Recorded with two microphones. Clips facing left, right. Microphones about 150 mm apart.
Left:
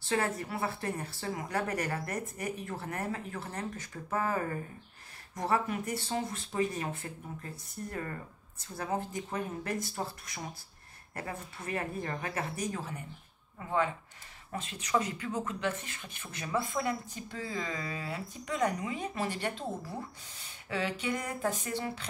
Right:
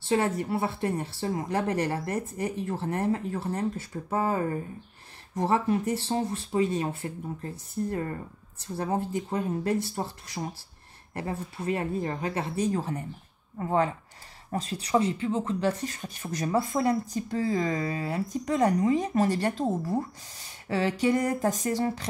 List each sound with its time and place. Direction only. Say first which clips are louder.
0.1 s a woman's voice: right 6 dB; 25° right (ahead or behind)
5.3 s a woman's voice: right 6 dB; 35° right (ahead or behind)